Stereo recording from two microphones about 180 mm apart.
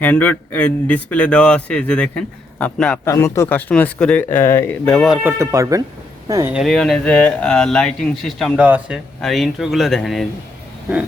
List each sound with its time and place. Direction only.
0.0 s a man's voice: 10° left (ahead or behind)
3.0 s a man's voice: 15° left (ahead or behind); by 5.3 s centre (ahead or behind)
5.4 s speech: 15° right (ahead or behind)
6.5 s speech: centre (ahead or behind)